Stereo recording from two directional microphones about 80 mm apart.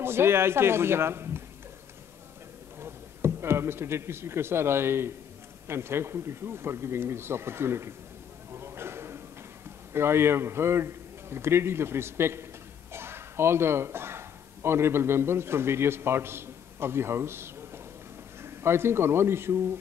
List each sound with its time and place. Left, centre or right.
0.0 s a man's voice: right
2.8 s a man's voice: right
8.5 s a sound: right
9.9 s a man's voice: right